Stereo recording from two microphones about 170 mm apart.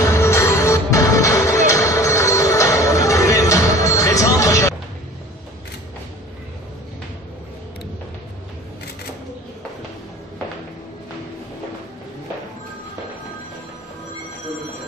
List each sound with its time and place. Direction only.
0.0 s music: 15° left (ahead or behind)